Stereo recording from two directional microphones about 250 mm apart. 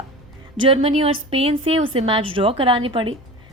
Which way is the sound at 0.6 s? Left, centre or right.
Right.